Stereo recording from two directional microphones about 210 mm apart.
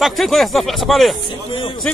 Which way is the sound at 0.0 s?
Centre (ahead or behind).